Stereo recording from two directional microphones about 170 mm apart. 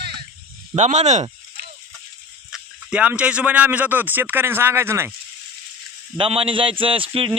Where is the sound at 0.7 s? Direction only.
40° right (ahead or behind).